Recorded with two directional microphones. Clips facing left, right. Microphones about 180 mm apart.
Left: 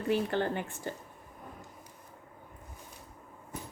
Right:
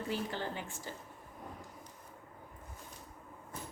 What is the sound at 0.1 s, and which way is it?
Speech, 60° left (ahead or behind).